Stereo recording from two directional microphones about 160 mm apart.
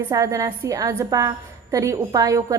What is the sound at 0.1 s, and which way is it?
A woman's voice, 20° right (ahead or behind).